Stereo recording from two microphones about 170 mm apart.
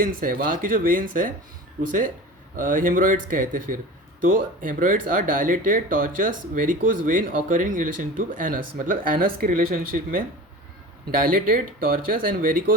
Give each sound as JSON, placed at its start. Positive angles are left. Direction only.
{"t": 0.0, "sound": "speech", "side_deg": -55}